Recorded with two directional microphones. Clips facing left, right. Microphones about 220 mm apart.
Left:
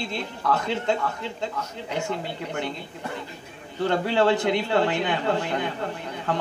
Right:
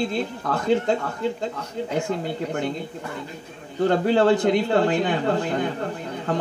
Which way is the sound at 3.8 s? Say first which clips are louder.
Right 4 dB; 45° right (ahead or behind).